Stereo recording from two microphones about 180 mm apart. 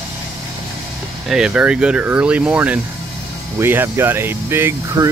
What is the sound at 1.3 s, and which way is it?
Speech, 5° right (ahead or behind).